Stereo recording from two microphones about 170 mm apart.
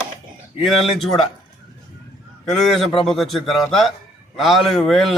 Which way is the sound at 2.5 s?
Centre (ahead or behind).